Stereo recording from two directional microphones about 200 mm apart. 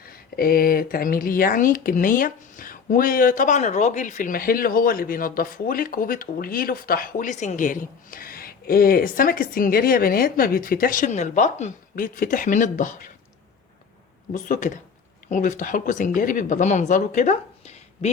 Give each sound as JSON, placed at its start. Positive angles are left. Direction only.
{"t": 0.0, "sound": "speech", "side_deg": 45}
{"t": 14.3, "sound": "speech", "side_deg": 40}